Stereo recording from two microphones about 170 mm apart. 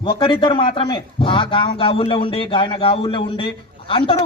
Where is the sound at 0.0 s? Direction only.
30° left (ahead or behind).